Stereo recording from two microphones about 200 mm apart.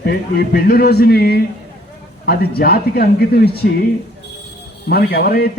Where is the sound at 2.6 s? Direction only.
50° left (ahead or behind).